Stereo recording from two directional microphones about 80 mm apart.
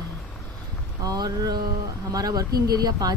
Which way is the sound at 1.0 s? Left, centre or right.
Right.